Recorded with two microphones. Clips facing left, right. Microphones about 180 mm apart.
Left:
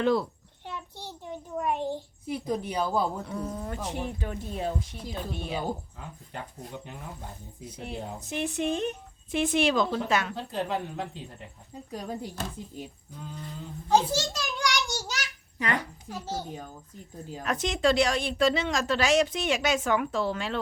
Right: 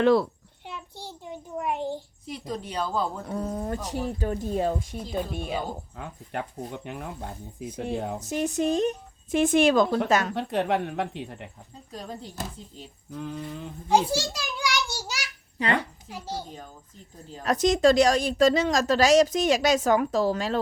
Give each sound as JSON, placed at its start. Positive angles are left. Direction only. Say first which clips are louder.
{"t": 0.0, "sound": "speech", "louder": "right 5 dB", "side_deg": -70}
{"t": 0.7, "sound": "a sound", "louder": "even", "side_deg": -10}
{"t": 2.5, "sound": "speech", "louder": "left 1 dB", "side_deg": 10}
{"t": 3.2, "sound": "a woman's voice", "louder": "right 4 dB", "side_deg": -40}
{"t": 6.8, "sound": "speech", "louder": "right 6 dB", "side_deg": -70}
{"t": 8.2, "sound": "speech", "louder": "right 2 dB", "side_deg": -40}
{"t": 10.3, "sound": "speech", "louder": "right 5 dB", "side_deg": -70}
{"t": 11.9, "sound": "speech", "louder": "left 2 dB", "side_deg": 10}
{"t": 13.1, "sound": "speech", "louder": "right 7 dB", "side_deg": -70}
{"t": 13.8, "sound": "a sound", "louder": "right 1 dB", "side_deg": -10}
{"t": 15.5, "sound": "speech", "louder": "right 4 dB", "side_deg": -30}
{"t": 16.0, "sound": "a child's voice", "louder": "even", "side_deg": -10}
{"t": 17.4, "sound": "a woman's voice", "louder": "right 6 dB", "side_deg": -40}